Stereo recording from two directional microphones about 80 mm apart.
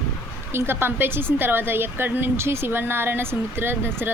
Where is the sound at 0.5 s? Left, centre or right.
Right.